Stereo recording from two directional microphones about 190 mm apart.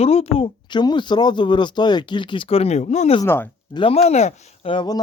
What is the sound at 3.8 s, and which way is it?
Speech, 30° left (ahead or behind).